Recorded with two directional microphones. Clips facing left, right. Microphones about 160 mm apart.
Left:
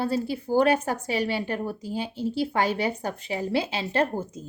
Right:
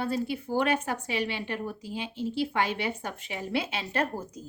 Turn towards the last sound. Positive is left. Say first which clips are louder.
# left 5 dB
turn(degrees=25)  # may be behind; listen again after turning